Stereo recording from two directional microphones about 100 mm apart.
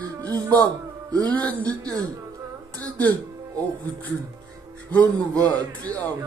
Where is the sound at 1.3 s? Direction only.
15° left (ahead or behind).